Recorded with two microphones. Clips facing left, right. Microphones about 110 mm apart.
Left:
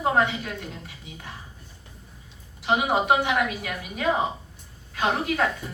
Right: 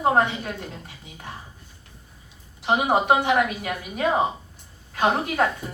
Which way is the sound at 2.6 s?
30° right (ahead or behind).